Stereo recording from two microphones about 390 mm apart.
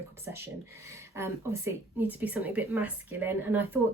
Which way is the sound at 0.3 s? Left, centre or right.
Centre.